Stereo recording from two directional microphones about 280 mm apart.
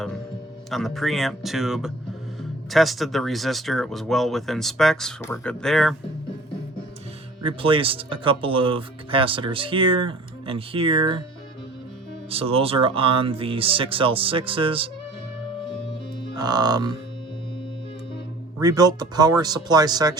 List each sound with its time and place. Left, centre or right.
0.7 s speech: centre
7.4 s speech: centre
12.3 s speech: centre
16.3 s speech: centre
18.6 s speech: centre